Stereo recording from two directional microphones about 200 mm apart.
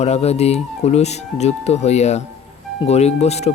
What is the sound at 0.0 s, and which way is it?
Speech, 30° left (ahead or behind).